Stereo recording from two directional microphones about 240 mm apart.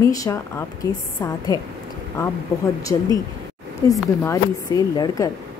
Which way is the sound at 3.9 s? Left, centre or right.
Centre.